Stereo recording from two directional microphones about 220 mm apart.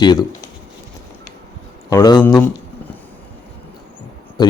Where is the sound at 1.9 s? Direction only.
15° left (ahead or behind).